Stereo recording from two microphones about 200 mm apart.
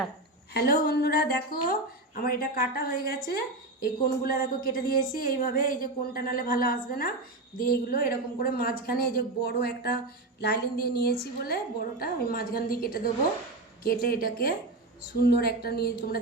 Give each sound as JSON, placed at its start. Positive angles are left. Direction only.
{"t": 0.5, "sound": "a woman's voice", "side_deg": 50}